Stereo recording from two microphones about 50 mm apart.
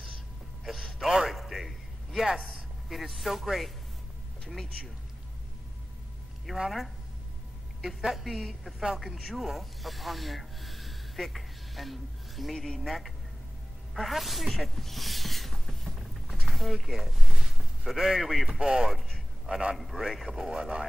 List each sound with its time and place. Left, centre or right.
0.7 s a sound: centre
1.0 s a sound: centre
2.5 s speech: centre
6.5 s speech: centre
7.8 s a woman's voice: centre
12.5 s speech: centre
13.9 s a sound: centre
16.7 s speech: centre
18.5 s speech: centre
19.8 s speech: centre